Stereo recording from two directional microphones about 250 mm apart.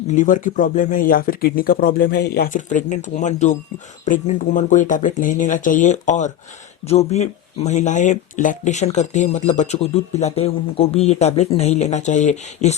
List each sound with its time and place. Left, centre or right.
0.1 s speech: left